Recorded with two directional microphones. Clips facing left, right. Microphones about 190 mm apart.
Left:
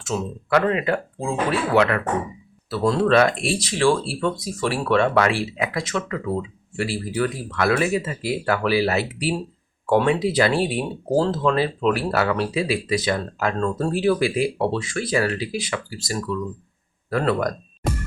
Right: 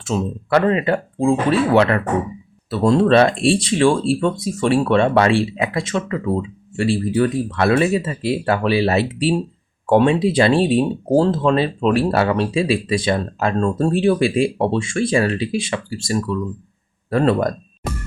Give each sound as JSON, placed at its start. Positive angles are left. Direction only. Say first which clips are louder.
{"t": 0.1, "sound": "speech", "louder": "right 3 dB", "side_deg": -30}